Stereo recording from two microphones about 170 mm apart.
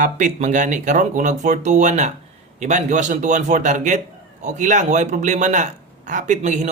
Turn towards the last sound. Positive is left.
turn(degrees=-45)  # may be behind; listen again after turning